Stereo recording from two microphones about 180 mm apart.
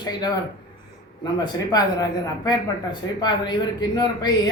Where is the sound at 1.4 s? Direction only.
20° left (ahead or behind).